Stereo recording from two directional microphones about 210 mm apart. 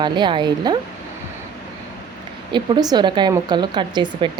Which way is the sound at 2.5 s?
20° right (ahead or behind).